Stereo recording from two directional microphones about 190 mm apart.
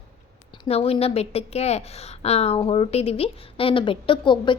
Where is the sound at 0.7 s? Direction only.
30° left (ahead or behind).